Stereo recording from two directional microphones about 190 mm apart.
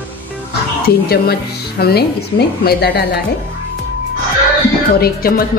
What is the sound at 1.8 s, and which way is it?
Speech, 55° left (ahead or behind).